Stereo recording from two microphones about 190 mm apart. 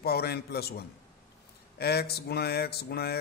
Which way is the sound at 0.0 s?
55° left (ahead or behind).